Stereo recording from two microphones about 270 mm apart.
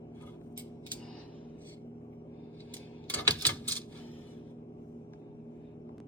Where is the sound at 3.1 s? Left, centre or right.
Centre.